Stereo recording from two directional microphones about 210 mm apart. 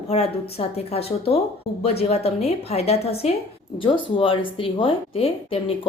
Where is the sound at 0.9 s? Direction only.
30° left (ahead or behind).